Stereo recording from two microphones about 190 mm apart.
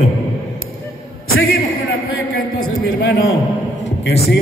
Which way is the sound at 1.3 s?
90° left.